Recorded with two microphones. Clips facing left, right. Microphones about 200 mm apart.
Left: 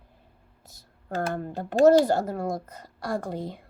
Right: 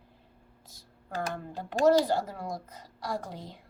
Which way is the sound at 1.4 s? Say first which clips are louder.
Left 9 dB; 45° left (ahead or behind).